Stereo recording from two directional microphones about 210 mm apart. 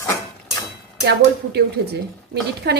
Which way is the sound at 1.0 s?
50° right (ahead or behind).